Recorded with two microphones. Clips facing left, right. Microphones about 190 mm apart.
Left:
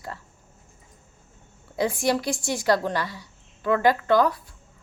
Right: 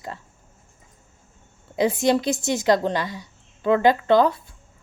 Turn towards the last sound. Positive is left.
turn(degrees=-25)  # may be behind; listen again after turning